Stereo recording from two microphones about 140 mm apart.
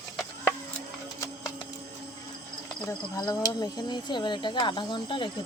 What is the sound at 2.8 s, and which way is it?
Speech, 25° left (ahead or behind).